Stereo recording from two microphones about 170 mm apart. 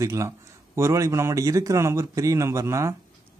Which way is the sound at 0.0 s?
20° right (ahead or behind).